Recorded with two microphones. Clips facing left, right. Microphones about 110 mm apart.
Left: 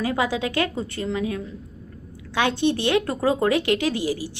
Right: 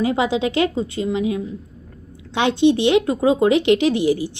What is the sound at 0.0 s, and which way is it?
A woman's voice, 20° right (ahead or behind).